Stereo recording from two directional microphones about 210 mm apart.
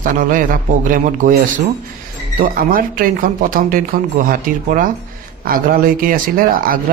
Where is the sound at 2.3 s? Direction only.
40° right (ahead or behind).